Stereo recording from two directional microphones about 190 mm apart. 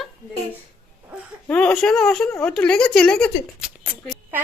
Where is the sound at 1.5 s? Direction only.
5° left (ahead or behind).